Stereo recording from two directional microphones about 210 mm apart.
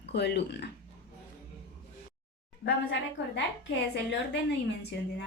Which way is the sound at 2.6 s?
55° left (ahead or behind).